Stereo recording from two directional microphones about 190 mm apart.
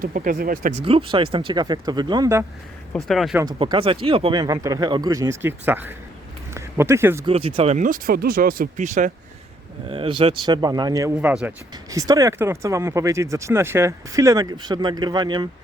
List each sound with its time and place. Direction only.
0.0 s speech: 45° right (ahead or behind)
0.8 s speech: 30° right (ahead or behind)
2.9 s speech: centre (ahead or behind)
3.4 s speech: 25° right (ahead or behind); by 5.9 s 10° right (ahead or behind)
6.5 s a sound: 15° right (ahead or behind)
7.3 s speech: 30° right (ahead or behind)
9.9 s speech: 30° right (ahead or behind)